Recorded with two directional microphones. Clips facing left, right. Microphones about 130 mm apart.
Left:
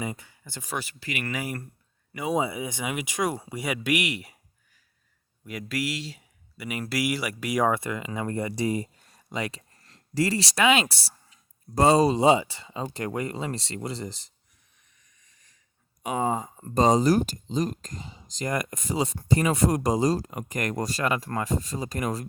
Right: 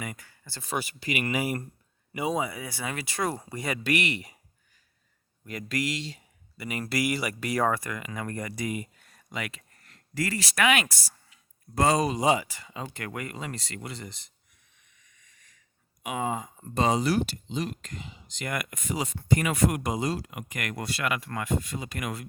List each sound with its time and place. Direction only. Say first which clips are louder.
0.0 s speech: left 5 dB; 20° left (ahead or behind)
0.8 s speech: right 4 dB; 15° right (ahead or behind)
2.3 s speech: left 4 dB; 20° left (ahead or behind); by 4.4 s 5° left (ahead or behind)
5.5 s speech: even; 5° left (ahead or behind)
7.7 s speech: left 3 dB; 25° left (ahead or behind)
15.0 s a sound: right 2 dB; 35° left (ahead or behind)
16.0 s speech: left 4 dB; 35° left (ahead or behind)